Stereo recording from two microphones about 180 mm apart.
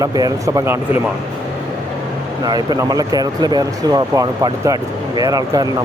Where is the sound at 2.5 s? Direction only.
20° right (ahead or behind).